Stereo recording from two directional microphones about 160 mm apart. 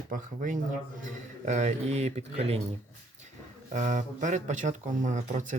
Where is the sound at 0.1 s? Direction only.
55° right (ahead or behind).